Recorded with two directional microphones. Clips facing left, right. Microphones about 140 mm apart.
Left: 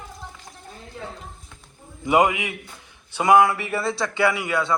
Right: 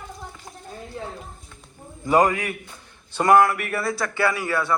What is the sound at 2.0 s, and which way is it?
A man's voice, 10° left (ahead or behind).